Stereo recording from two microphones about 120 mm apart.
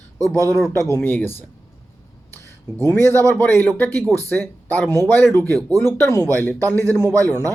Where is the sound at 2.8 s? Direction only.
20° left (ahead or behind).